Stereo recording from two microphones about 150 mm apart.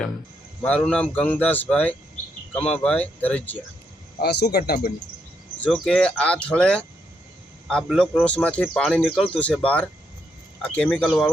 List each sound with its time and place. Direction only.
0.6 s speech: 5° left (ahead or behind)
4.2 s speech: 90° left
5.5 s speech: 5° left (ahead or behind)
8.1 s speech: 10° left (ahead or behind)